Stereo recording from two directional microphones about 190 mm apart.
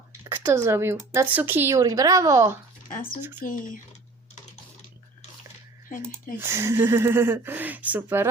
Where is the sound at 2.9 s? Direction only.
45° left (ahead or behind).